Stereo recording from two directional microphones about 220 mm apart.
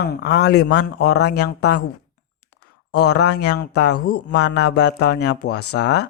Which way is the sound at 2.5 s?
90° left.